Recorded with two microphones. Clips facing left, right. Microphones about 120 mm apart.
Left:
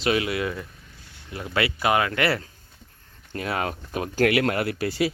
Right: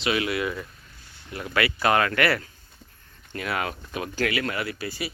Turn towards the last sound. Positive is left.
turn(degrees=70)  # may be behind; listen again after turning